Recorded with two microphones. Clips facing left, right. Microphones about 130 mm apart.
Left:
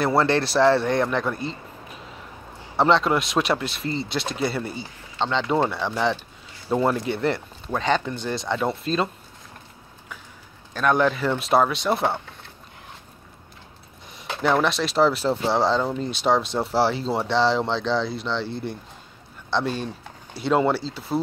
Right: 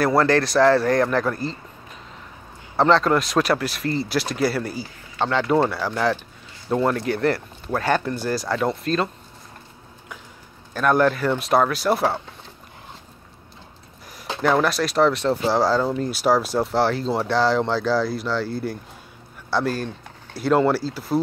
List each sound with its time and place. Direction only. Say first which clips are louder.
0.2 s speech: right 1 dB; 30° left (ahead or behind)
1.0 s speech: right 3 dB; centre (ahead or behind)
2.8 s speech: right 2 dB; centre (ahead or behind)
6.7 s speech: right 1 dB; 10° left (ahead or behind)
7.1 s speech: right 3 dB; centre (ahead or behind)
10.7 s speech: right 2 dB; 5° right (ahead or behind)
14.4 s speech: right 2 dB; centre (ahead or behind)